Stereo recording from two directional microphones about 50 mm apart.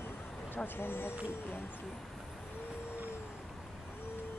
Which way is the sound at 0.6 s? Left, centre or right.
Left.